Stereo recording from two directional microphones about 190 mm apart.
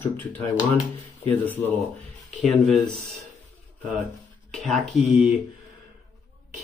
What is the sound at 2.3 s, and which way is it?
Speech, 5° left (ahead or behind).